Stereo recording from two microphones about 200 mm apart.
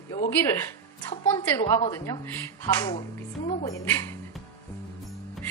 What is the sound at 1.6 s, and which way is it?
Speech, 20° left (ahead or behind).